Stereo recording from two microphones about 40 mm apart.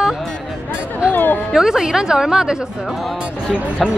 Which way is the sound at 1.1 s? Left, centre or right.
Left.